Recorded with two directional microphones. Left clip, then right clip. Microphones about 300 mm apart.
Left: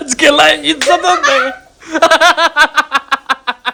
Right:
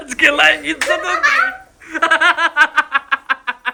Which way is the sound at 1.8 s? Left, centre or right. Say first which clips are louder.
Left 5 dB; centre.